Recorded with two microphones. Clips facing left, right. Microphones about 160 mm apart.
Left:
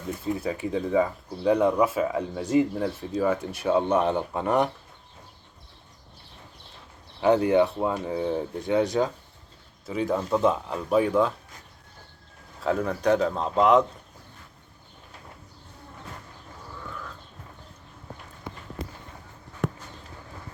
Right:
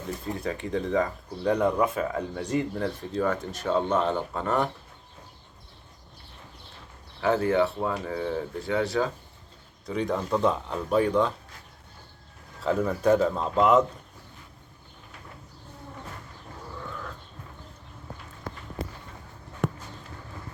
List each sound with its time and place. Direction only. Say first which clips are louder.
0.3 s speech: left 1 dB; 5° left (ahead or behind)
7.2 s speech: left 3 dB; 15° left (ahead or behind)
9.8 s speech: left 2 dB; 5° left (ahead or behind)
12.6 s speech: right 1 dB; centre (ahead or behind)